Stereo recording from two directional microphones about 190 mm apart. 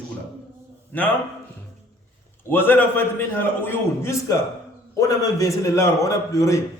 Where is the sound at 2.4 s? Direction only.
10° left (ahead or behind).